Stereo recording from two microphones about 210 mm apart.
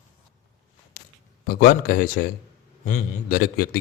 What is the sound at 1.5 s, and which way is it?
A man's voice, 45° left (ahead or behind).